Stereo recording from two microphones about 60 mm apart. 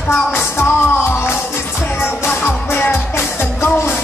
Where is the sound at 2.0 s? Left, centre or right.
Left.